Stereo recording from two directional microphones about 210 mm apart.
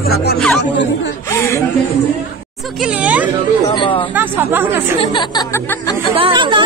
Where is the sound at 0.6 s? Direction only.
55° left (ahead or behind).